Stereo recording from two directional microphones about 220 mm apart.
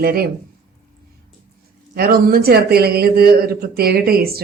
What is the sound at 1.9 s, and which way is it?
Speech, 45° right (ahead or behind).